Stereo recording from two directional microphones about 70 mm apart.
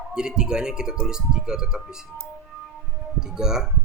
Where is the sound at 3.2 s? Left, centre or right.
Centre.